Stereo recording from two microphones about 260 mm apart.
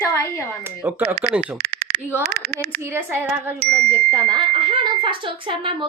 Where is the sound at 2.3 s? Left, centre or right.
Right.